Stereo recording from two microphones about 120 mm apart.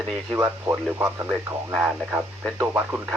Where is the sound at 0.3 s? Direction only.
20° right (ahead or behind).